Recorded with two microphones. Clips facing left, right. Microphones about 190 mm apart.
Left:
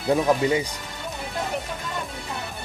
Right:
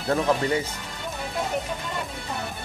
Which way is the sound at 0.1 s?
15° left (ahead or behind).